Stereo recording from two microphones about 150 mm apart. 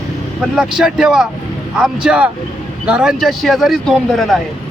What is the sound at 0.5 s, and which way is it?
A man's voice, 5° right (ahead or behind).